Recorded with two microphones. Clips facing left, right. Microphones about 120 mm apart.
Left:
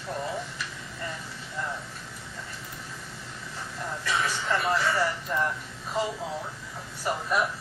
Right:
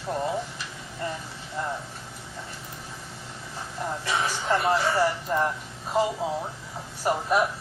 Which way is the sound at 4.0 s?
30° right (ahead or behind).